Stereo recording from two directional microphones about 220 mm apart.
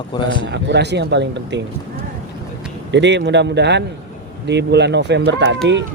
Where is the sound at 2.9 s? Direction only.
55° right (ahead or behind).